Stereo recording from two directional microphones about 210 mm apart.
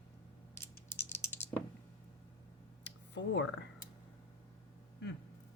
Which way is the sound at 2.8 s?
55° left (ahead or behind).